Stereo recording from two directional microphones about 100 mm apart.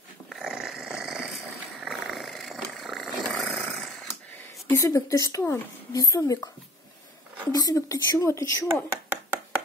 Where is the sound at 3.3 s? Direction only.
Centre (ahead or behind).